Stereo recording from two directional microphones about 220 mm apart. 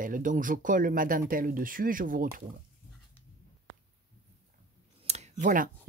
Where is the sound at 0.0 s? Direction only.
35° right (ahead or behind).